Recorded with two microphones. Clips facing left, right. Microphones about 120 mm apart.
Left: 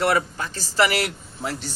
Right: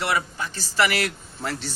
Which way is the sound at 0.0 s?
45° left (ahead or behind).